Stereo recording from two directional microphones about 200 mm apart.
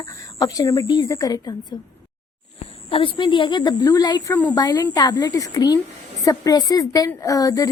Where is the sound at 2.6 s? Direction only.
25° left (ahead or behind).